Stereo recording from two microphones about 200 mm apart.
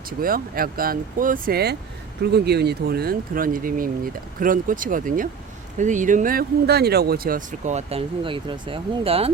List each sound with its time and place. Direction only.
0.2 s speech: 45° right (ahead or behind); by 9.3 s 30° right (ahead or behind)